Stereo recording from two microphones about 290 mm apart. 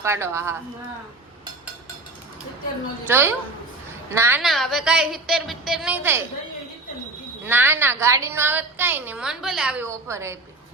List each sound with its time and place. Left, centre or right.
0.0 s a woman's voice: centre
3.1 s a woman's voice: centre
7.4 s a woman's voice: centre